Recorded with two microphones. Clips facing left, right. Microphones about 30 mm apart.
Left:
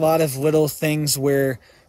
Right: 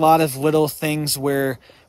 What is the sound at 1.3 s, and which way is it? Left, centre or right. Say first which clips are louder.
Speech: left 2 dB; right.